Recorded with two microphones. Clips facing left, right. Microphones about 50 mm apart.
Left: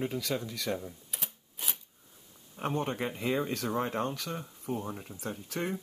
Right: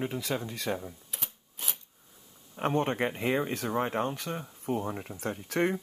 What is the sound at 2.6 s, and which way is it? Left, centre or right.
Speech, right.